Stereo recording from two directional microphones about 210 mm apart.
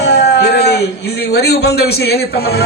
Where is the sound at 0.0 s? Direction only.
50° left (ahead or behind).